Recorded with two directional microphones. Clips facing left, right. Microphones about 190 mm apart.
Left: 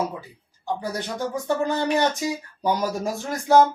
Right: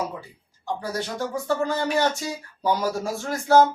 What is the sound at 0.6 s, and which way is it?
Speech, 15° left (ahead or behind).